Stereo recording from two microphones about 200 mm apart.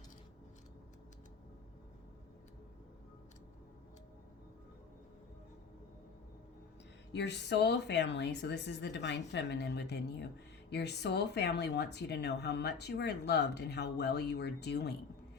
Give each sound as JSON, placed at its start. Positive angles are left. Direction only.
{"t": 7.1, "sound": "a woman's voice", "side_deg": 60}